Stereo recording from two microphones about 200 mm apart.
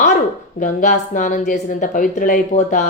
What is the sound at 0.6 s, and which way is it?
Speech, 40° left (ahead or behind).